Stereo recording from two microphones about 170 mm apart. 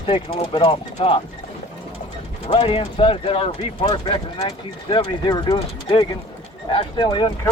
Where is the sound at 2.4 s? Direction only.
35° left (ahead or behind).